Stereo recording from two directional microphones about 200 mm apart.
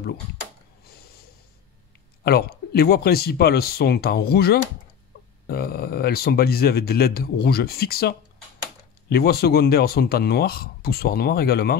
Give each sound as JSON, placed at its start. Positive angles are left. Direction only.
{"t": 2.2, "sound": "a man's voice", "side_deg": 50}